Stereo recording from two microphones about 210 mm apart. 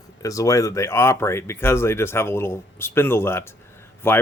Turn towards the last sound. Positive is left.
turn(degrees=10)  # may be behind; listen again after turning